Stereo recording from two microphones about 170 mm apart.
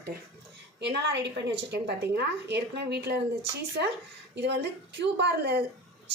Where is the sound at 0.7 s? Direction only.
90° right.